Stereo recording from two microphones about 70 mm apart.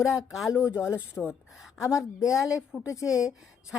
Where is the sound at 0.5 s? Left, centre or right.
Centre.